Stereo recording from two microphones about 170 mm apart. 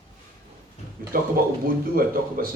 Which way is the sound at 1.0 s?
60° right (ahead or behind).